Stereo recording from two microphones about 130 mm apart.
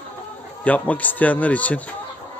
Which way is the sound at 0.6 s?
10° left (ahead or behind).